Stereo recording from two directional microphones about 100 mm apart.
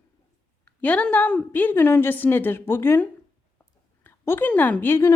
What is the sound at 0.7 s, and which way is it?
A woman's voice, 15° left (ahead or behind).